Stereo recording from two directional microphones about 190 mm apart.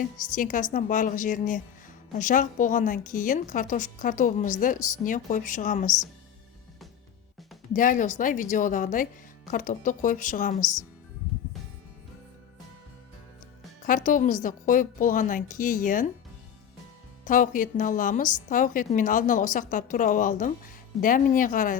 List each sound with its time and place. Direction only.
0.0 s a woman's voice: 45° left (ahead or behind)
7.7 s a woman's voice: 45° left (ahead or behind)
13.8 s a woman's voice: 45° left (ahead or behind)
17.2 s a woman's voice: 45° left (ahead or behind)